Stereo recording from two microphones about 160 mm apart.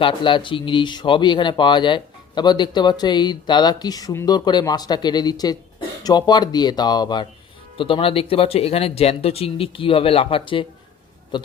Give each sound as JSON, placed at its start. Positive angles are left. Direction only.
{"t": 0.0, "sound": "speech", "side_deg": 30}